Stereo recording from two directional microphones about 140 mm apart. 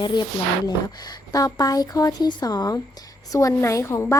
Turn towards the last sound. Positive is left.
turn(degrees=20)  # may be behind; listen again after turning